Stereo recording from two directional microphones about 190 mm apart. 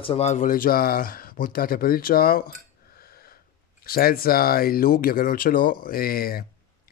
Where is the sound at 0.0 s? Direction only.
35° left (ahead or behind).